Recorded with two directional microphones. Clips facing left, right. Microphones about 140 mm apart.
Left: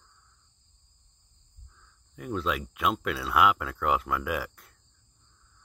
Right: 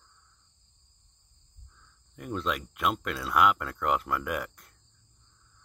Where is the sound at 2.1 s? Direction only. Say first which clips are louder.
Left 2 dB; centre (ahead or behind).